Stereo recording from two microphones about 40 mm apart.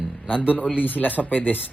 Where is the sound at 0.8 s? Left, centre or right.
Left.